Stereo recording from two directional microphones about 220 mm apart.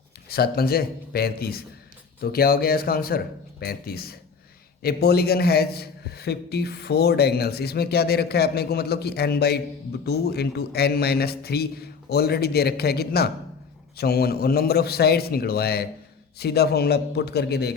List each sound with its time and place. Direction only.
0.3 s a man's voice: 45° left (ahead or behind)